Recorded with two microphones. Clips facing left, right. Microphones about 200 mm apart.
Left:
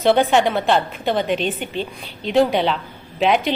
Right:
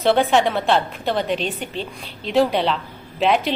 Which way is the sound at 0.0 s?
Centre (ahead or behind).